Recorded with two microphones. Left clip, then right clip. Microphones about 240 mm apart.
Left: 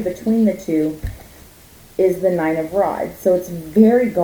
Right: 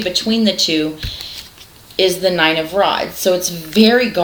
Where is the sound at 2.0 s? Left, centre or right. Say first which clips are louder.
Right 3 dB; right.